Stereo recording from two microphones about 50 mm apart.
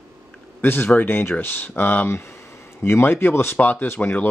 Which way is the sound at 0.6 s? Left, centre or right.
Left.